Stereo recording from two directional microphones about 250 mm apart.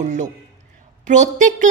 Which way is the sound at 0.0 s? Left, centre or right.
Right.